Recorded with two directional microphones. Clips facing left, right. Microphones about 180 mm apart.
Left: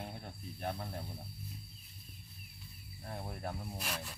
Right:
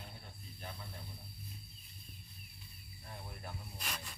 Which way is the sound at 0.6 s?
60° left (ahead or behind).